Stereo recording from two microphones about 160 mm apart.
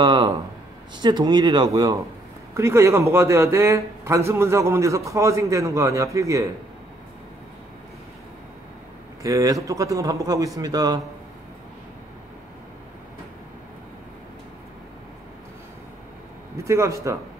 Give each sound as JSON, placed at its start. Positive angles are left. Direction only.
{"t": 0.0, "sound": "a sound", "side_deg": -30}
{"t": 0.9, "sound": "a man's voice", "side_deg": -25}
{"t": 9.2, "sound": "a man's voice", "side_deg": -20}
{"t": 16.6, "sound": "a man's voice", "side_deg": -20}